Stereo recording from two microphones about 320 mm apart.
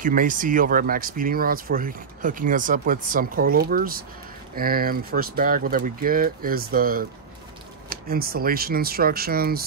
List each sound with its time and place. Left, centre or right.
0.0 s speech: right